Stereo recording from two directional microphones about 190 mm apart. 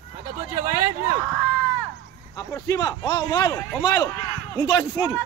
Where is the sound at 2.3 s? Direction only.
20° left (ahead or behind).